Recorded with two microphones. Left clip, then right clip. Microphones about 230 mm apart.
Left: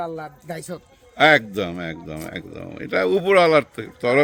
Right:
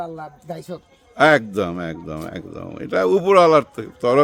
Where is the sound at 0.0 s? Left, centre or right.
Centre.